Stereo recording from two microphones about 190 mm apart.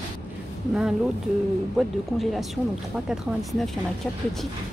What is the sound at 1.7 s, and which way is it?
Speech, centre (ahead or behind).